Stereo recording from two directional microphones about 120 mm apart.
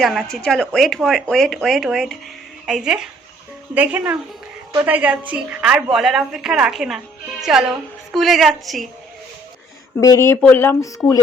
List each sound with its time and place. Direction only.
0.0 s a woman's voice: centre (ahead or behind)
10.0 s speech: 25° left (ahead or behind)